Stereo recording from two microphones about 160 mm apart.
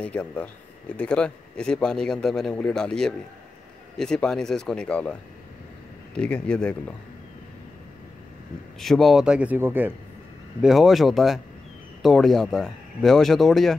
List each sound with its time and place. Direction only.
0.0 s a man's voice: 10° left (ahead or behind)
6.1 s speech: 5° left (ahead or behind)
8.7 s a man's voice: centre (ahead or behind)
10.6 s a man's voice: centre (ahead or behind)